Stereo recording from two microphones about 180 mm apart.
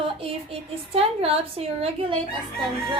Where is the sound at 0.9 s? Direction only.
35° right (ahead or behind).